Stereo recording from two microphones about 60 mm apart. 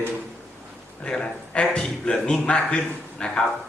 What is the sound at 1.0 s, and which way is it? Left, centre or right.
Speech, centre.